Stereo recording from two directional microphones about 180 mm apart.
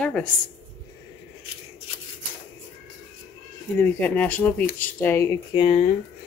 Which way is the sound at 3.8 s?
10° left (ahead or behind).